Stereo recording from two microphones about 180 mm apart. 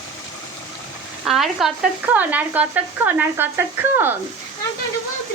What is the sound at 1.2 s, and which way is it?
Speech, centre (ahead or behind).